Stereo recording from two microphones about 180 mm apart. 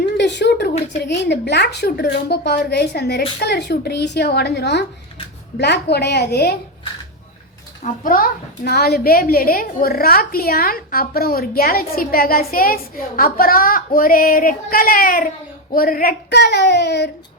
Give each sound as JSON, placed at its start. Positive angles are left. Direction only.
{"t": 0.2, "sound": "a woman's voice", "side_deg": 75}
{"t": 8.0, "sound": "a woman's voice", "side_deg": 50}